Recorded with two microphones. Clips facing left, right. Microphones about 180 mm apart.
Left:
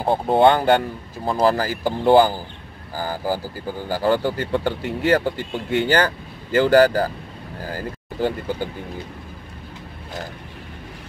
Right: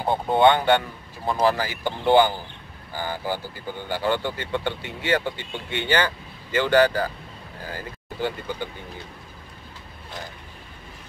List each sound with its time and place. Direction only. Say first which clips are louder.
0.0 s speech: left 3 dB; 35° left (ahead or behind)